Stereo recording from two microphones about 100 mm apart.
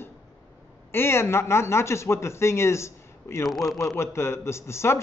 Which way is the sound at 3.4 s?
Centre (ahead or behind).